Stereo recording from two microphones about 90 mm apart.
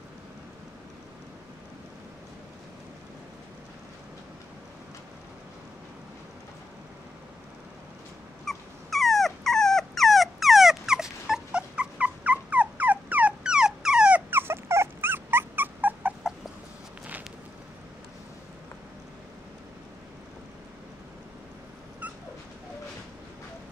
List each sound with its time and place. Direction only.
8.5 s dog: centre (ahead or behind)
14.3 s dog: 25° right (ahead or behind)